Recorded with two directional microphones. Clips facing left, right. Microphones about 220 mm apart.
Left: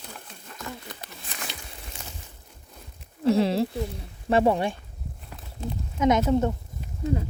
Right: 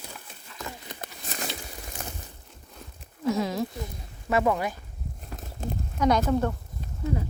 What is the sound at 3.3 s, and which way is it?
Speech, 30° left (ahead or behind).